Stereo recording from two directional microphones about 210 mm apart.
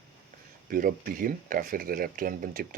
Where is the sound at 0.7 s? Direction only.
45° right (ahead or behind).